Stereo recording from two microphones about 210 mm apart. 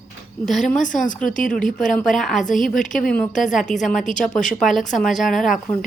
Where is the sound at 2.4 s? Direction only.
40° left (ahead or behind).